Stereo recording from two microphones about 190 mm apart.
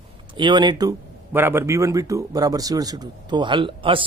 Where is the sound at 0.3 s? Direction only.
25° right (ahead or behind).